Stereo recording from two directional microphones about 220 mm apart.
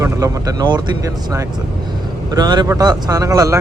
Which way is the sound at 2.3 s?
20° right (ahead or behind).